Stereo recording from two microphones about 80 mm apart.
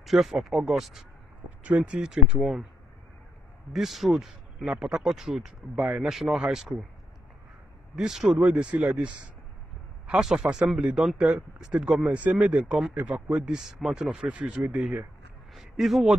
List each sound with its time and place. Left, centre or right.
0.0 s speech: centre
1.6 s speech: centre
3.7 s speech: centre
7.9 s speech: centre
15.5 s a man's voice: centre